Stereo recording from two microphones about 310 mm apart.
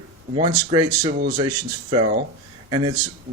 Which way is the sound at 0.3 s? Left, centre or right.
Centre.